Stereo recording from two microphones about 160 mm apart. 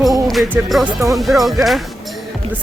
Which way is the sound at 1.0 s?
20° right (ahead or behind).